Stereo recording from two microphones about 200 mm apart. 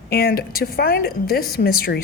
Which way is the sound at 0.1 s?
50° left (ahead or behind).